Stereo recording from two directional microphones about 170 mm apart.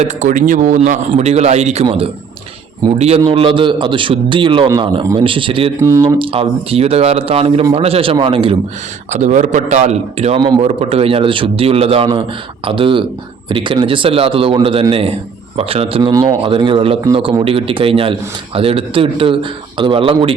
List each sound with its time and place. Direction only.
0.0 s a man's voice: 45° right (ahead or behind)
9.0 s a man's voice: 45° right (ahead or behind)